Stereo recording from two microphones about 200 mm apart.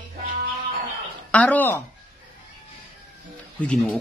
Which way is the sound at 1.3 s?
5° left (ahead or behind).